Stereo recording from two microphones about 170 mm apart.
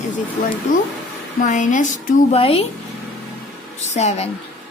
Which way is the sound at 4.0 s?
40° left (ahead or behind).